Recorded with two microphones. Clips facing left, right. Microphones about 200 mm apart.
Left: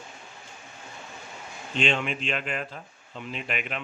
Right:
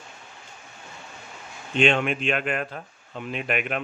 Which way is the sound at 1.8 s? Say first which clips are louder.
Right 6 dB; 55° right (ahead or behind).